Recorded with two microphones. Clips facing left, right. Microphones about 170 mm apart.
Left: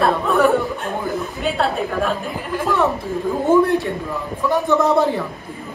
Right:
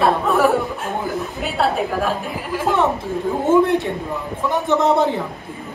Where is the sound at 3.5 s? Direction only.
20° right (ahead or behind).